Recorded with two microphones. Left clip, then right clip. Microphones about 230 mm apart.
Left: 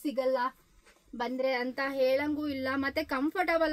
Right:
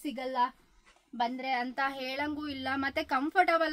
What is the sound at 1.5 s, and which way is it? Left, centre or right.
A woman's voice, centre.